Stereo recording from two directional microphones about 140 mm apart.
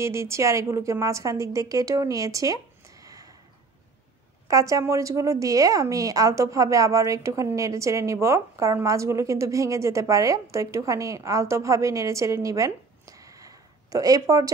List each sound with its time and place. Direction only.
0.0 s a woman's voice: 20° right (ahead or behind)
4.5 s a woman's voice: 25° right (ahead or behind)